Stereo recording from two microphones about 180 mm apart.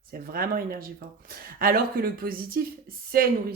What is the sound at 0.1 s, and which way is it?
Speech, 55° right (ahead or behind).